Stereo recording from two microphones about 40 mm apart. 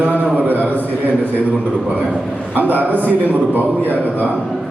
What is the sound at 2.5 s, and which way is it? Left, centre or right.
A man's voice, right.